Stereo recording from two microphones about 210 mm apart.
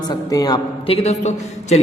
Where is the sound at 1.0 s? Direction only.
30° left (ahead or behind).